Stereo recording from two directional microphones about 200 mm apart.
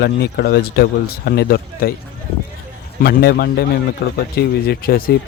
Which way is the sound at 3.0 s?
50° left (ahead or behind).